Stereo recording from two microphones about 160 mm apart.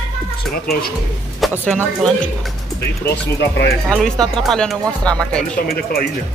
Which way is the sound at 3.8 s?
5° left (ahead or behind).